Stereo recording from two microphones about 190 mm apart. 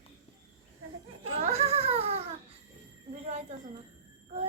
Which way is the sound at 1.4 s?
35° right (ahead or behind).